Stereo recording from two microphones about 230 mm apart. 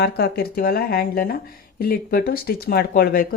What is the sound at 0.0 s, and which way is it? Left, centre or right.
A woman's voice, left.